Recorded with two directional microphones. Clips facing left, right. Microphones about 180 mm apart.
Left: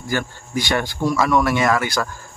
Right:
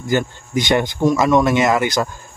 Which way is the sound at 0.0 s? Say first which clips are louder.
Right 5 dB; 20° right (ahead or behind).